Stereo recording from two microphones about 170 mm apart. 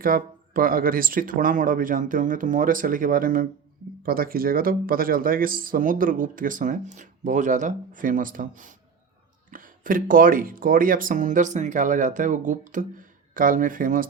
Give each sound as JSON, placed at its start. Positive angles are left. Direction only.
{"t": 0.0, "sound": "a man's voice", "side_deg": -55}